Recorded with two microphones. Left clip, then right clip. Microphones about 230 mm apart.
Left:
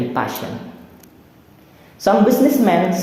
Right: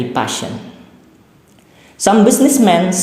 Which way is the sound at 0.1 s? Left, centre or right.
Right.